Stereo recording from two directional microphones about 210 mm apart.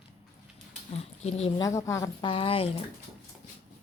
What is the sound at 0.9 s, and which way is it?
Speech, 30° left (ahead or behind).